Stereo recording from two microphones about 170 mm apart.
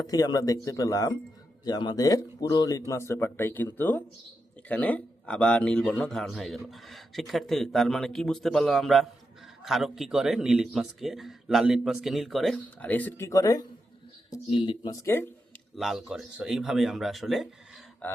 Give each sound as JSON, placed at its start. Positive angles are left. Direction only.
{"t": 0.1, "sound": "a man's voice", "side_deg": 20}
{"t": 14.4, "sound": "speech", "side_deg": 30}
{"t": 15.0, "sound": "speech", "side_deg": 15}
{"t": 15.7, "sound": "a man's voice", "side_deg": 0}
{"t": 18.0, "sound": "speech", "side_deg": 10}